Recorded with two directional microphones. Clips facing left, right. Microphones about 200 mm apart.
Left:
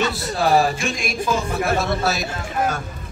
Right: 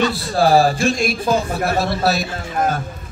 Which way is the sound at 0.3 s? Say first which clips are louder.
Right 4 dB; 30° right (ahead or behind).